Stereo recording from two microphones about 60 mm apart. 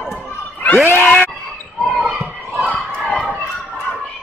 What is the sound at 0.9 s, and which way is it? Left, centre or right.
Screaming, left.